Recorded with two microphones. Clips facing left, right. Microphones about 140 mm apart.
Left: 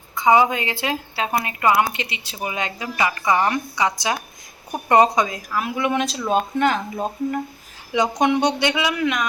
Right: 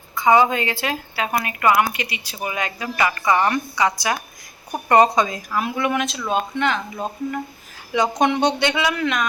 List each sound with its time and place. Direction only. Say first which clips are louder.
0.2 s a woman's voice: even; 15° left (ahead or behind); by 5.7 s centre (ahead or behind)
5.9 s speech: left 2 dB; 35° left (ahead or behind)
7.9 s speech: even; 15° left (ahead or behind)